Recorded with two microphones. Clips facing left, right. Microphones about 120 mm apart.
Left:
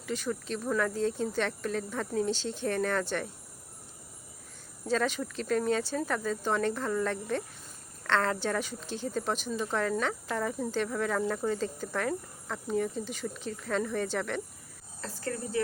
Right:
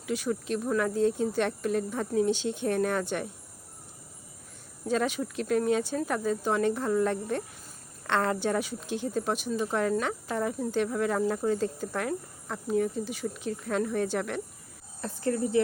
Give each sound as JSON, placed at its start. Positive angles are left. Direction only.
{"t": 0.0, "sound": "speech", "side_deg": -10}
{"t": 4.9, "sound": "speech", "side_deg": -10}
{"t": 15.0, "sound": "speech", "side_deg": -25}